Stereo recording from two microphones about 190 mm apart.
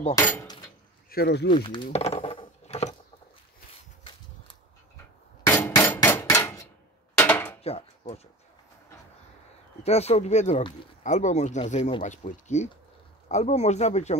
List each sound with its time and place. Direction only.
0.1 s speech: 15° left (ahead or behind)
1.1 s speech: 60° left (ahead or behind)
1.5 s a sound: 25° left (ahead or behind)
5.5 s hammer: 10° left (ahead or behind)
7.2 s dishes: 10° left (ahead or behind)
7.6 s a sound: 30° left (ahead or behind)
9.8 s speech: 35° left (ahead or behind)